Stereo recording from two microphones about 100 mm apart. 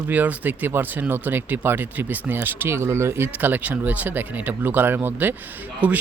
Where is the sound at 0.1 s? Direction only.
15° right (ahead or behind).